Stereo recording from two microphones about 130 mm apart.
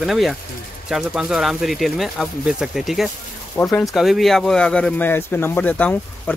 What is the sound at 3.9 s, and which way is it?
Speech, centre (ahead or behind).